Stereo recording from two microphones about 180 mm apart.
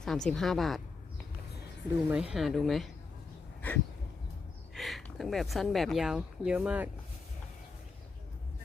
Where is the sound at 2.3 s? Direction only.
Centre (ahead or behind).